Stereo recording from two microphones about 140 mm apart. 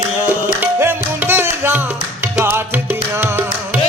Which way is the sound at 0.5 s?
15° right (ahead or behind).